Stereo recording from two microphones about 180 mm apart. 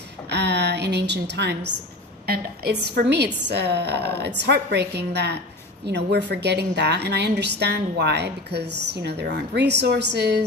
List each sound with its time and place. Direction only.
0.3 s a woman's voice: 70° right (ahead or behind)
2.2 s a woman's voice: 60° right (ahead or behind)